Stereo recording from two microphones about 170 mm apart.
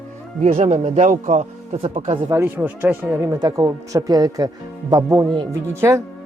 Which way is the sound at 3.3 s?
20° right (ahead or behind).